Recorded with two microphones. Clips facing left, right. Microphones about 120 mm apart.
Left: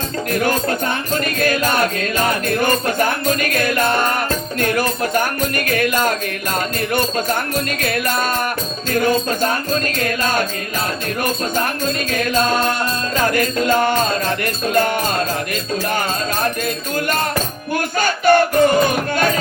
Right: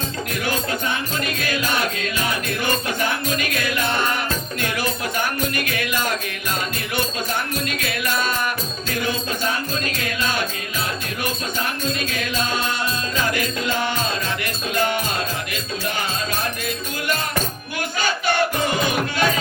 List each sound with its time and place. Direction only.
0.3 s music: 45° left (ahead or behind)
18.0 s music: 50° left (ahead or behind)